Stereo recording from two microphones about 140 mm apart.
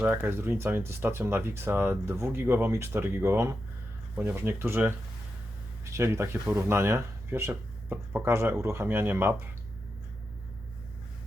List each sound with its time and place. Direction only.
0.0 s speech: 15° right (ahead or behind)